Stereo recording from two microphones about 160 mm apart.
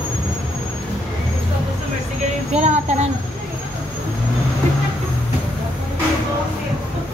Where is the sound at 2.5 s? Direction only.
45° right (ahead or behind).